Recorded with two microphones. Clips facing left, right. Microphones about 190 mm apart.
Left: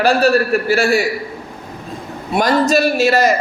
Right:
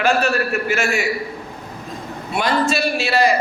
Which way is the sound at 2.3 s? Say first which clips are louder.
Left 5 dB; 40° left (ahead or behind).